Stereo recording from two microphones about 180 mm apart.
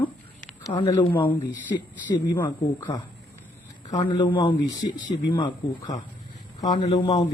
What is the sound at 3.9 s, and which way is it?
Speech, 25° left (ahead or behind).